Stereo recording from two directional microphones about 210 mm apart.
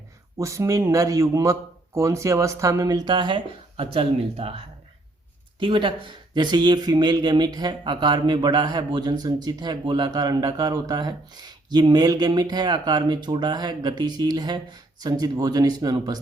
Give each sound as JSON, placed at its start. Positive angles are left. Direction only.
{"t": 0.3, "sound": "a man's voice", "side_deg": -15}